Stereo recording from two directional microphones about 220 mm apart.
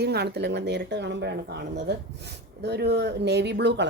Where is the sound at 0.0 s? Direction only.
50° right (ahead or behind).